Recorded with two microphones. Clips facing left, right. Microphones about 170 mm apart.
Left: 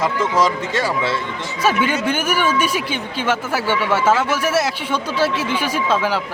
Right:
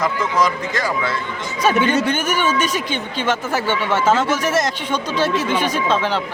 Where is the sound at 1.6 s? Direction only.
10° left (ahead or behind).